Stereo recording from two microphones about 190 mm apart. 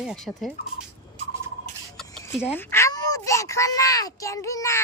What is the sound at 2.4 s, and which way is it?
Speech, 10° left (ahead or behind).